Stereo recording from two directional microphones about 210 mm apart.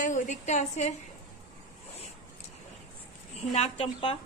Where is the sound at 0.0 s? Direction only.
35° left (ahead or behind).